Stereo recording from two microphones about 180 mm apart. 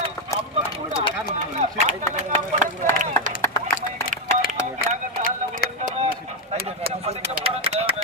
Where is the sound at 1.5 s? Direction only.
40° right (ahead or behind).